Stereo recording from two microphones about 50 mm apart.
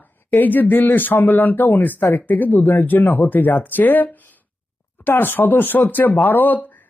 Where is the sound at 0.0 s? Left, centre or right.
Left.